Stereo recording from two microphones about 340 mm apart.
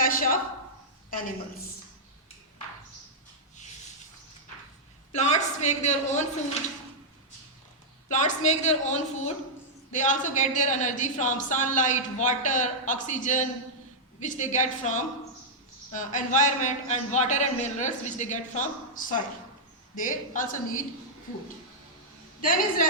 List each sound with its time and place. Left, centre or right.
0.0 s a sound: left
5.1 s speech: centre
8.0 s speech: left
22.4 s speech: left